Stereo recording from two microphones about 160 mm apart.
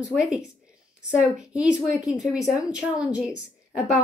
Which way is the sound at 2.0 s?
20° left (ahead or behind).